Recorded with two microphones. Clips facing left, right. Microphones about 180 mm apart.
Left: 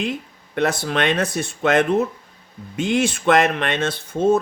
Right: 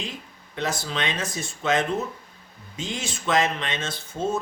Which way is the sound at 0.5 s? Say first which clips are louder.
Left 8 dB; 60° left (ahead or behind).